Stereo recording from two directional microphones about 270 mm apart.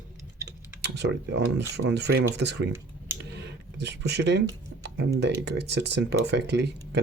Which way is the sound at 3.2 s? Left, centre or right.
Right.